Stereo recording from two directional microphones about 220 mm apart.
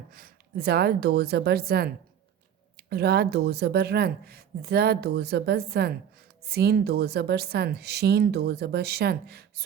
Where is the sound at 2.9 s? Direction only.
45° right (ahead or behind).